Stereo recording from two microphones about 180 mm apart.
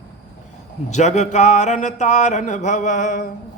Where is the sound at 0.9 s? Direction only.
40° left (ahead or behind).